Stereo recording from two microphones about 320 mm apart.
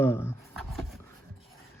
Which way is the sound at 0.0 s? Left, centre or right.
Centre.